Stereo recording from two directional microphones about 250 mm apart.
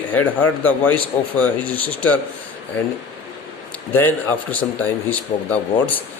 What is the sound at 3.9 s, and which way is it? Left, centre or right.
A man's voice, centre.